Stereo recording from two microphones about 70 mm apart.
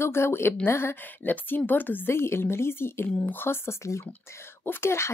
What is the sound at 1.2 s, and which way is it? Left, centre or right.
Speech, left.